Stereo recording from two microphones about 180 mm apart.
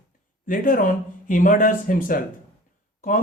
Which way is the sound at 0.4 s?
50° left (ahead or behind).